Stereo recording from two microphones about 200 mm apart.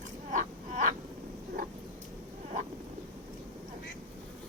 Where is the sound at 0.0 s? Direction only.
40° right (ahead or behind).